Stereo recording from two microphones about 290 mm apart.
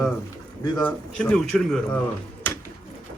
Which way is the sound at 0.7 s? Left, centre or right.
Centre.